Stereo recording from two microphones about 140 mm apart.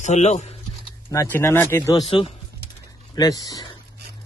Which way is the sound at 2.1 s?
35° left (ahead or behind).